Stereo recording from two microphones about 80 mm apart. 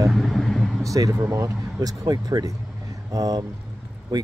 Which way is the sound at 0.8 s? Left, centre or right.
Right.